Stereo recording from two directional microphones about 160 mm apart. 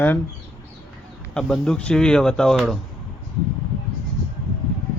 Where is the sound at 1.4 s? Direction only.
5° left (ahead or behind).